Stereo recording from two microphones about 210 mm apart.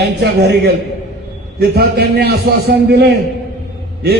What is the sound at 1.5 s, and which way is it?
A man's voice, 50° right (ahead or behind).